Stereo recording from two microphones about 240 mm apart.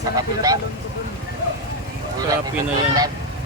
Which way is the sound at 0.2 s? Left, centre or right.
Centre.